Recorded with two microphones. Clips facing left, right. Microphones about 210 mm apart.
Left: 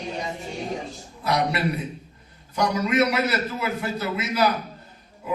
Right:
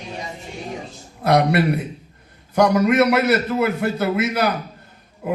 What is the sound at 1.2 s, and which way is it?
A man's voice, 60° right (ahead or behind).